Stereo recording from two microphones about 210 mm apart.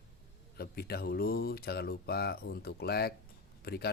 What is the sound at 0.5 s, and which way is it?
Speech, 50° left (ahead or behind).